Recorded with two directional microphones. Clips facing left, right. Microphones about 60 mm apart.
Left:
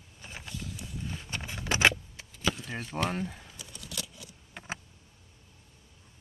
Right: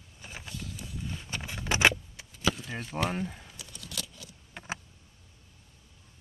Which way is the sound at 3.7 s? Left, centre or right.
Centre.